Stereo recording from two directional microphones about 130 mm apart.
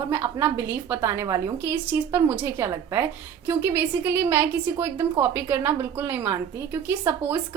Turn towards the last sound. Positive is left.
turn(degrees=-15)  # may be behind; listen again after turning